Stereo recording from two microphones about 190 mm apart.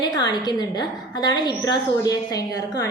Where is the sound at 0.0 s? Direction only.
20° left (ahead or behind).